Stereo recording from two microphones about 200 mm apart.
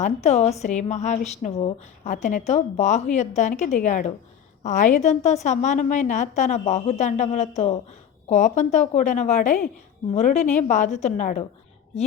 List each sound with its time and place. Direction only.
0.0 s a woman's voice: 35° left (ahead or behind)